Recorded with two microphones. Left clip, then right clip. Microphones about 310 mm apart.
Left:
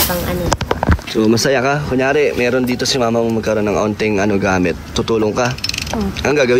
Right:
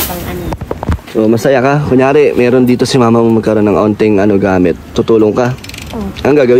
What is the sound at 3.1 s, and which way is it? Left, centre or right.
Speech, right.